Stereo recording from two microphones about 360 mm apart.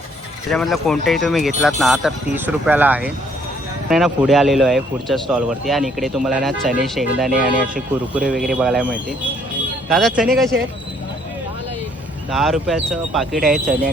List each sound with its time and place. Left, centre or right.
0.5 s a man's voice: centre
7.3 s speech: right
8.1 s a man's voice: centre
12.3 s a man's voice: centre